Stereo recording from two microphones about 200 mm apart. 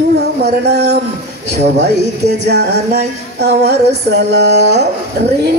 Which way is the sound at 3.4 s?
55° right (ahead or behind).